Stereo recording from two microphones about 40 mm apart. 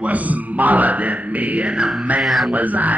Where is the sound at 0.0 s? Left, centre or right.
Right.